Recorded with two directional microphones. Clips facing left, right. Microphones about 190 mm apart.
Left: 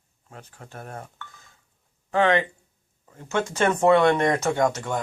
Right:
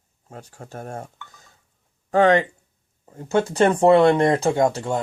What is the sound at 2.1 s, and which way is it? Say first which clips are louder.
Speech: right 4 dB; 40° right (ahead or behind).